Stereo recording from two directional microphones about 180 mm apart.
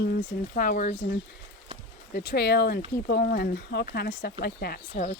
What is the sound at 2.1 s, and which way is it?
Speech, 65° left (ahead or behind).